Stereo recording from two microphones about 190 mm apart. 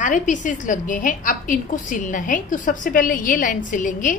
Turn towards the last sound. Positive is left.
turn(degrees=40)  # may be behind; listen again after turning